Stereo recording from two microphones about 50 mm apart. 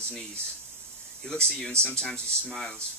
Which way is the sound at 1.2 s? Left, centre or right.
Centre.